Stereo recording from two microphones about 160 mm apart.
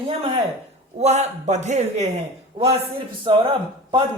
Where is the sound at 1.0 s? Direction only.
45° right (ahead or behind).